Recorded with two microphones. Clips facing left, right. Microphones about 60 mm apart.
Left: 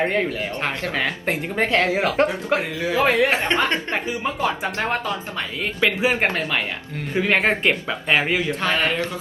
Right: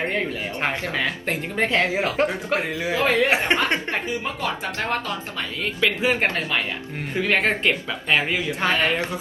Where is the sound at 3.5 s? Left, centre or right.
Centre.